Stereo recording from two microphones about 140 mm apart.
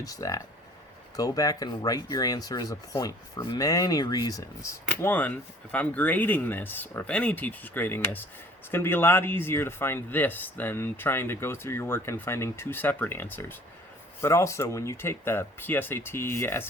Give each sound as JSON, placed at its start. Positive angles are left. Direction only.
{"t": 0.0, "sound": "speech", "side_deg": 25}